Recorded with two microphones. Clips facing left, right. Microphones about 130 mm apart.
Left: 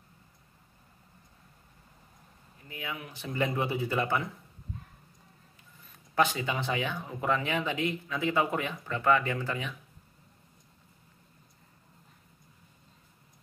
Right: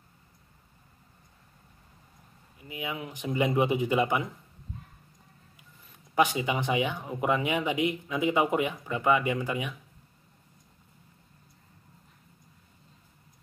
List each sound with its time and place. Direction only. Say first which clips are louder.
2.7 s speech: right 4 dB; 20° right (ahead or behind)
6.1 s speech: right 2 dB; 15° right (ahead or behind)